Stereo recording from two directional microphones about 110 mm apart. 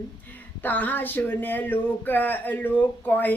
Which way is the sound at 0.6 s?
15° left (ahead or behind).